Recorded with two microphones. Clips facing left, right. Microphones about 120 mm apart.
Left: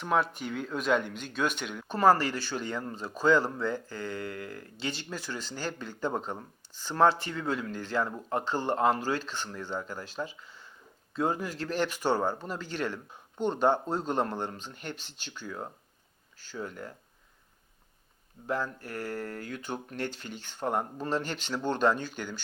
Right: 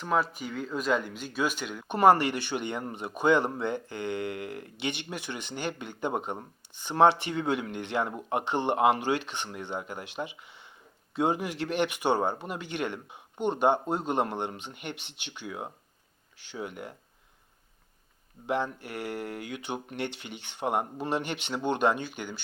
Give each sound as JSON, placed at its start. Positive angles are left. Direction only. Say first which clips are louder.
{"t": 0.0, "sound": "speech", "louder": "even", "side_deg": 0}
{"t": 1.9, "sound": "a man's voice", "louder": "right 2 dB", "side_deg": -20}
{"t": 11.3, "sound": "speech", "louder": "right 2 dB", "side_deg": -75}
{"t": 11.7, "sound": "speech", "louder": "right 1 dB", "side_deg": -15}
{"t": 14.9, "sound": "speech", "louder": "right 1 dB", "side_deg": -65}
{"t": 15.2, "sound": "speech", "louder": "right 1 dB", "side_deg": -15}
{"t": 18.4, "sound": "speech", "louder": "right 2 dB", "side_deg": -20}